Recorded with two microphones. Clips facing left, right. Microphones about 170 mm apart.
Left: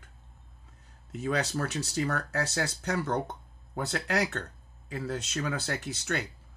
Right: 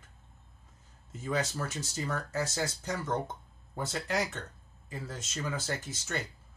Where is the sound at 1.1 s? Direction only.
70° left (ahead or behind).